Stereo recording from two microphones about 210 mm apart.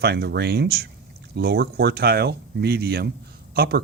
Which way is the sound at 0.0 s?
50° right (ahead or behind).